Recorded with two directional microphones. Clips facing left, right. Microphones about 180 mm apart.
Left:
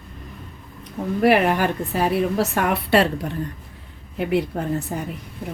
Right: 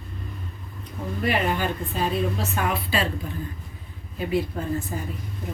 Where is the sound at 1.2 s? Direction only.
75° left (ahead or behind).